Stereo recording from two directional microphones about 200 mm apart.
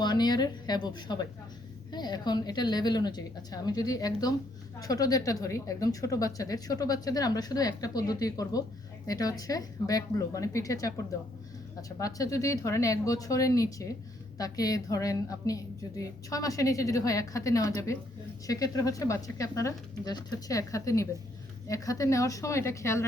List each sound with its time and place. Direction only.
0.0 s a woman's voice: 20° left (ahead or behind)